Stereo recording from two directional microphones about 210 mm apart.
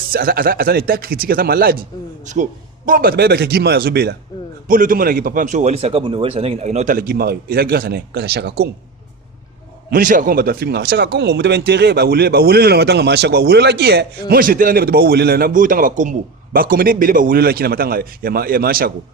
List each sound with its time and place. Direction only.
0.1 s speech: 45° right (ahead or behind)
9.9 s speech: 40° right (ahead or behind)